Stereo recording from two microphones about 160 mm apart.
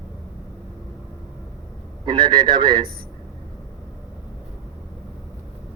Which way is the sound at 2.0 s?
30° right (ahead or behind).